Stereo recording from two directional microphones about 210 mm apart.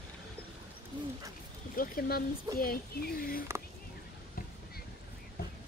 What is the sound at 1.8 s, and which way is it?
Speech, 45° left (ahead or behind).